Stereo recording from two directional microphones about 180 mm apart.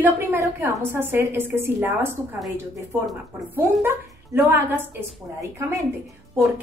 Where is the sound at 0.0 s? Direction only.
15° right (ahead or behind).